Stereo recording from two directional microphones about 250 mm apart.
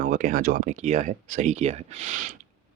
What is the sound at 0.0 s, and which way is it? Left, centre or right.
Speech, right.